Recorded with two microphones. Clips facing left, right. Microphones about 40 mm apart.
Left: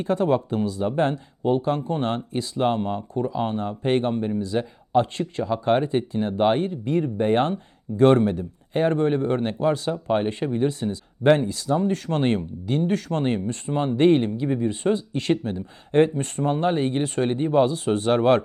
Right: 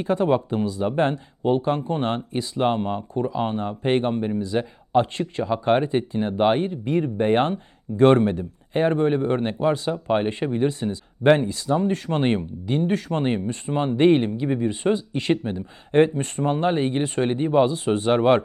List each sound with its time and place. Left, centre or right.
0.0 s speech: right